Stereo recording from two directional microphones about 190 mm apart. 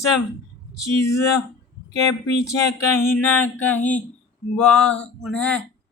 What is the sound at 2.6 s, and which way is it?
Speech, 15° left (ahead or behind).